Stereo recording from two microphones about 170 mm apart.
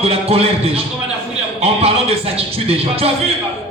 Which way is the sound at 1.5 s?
35° right (ahead or behind).